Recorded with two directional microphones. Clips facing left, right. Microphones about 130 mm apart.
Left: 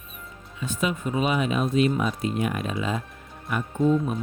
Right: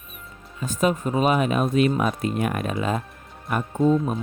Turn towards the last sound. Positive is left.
turn(degrees=-35)  # may be behind; listen again after turning